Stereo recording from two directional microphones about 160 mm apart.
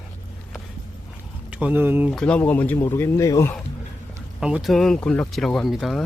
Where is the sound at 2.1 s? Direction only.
5° left (ahead or behind).